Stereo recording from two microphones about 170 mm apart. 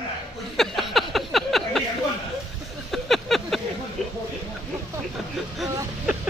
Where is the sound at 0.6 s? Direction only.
Centre (ahead or behind).